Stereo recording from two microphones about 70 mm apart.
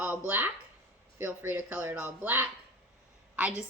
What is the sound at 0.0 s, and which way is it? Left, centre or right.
Speech, right.